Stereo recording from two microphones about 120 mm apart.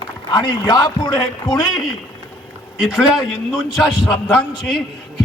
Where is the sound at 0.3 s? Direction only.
35° left (ahead or behind).